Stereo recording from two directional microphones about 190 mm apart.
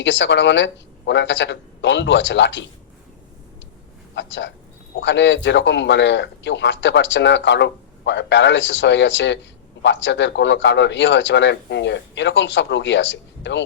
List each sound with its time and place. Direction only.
0.0 s a man's voice: 70° left (ahead or behind)
4.1 s a man's voice: 70° left (ahead or behind)